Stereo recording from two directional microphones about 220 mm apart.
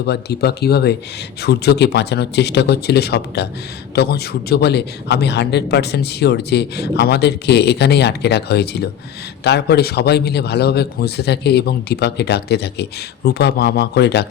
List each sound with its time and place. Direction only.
0.0 s a man's voice: 50° left (ahead or behind)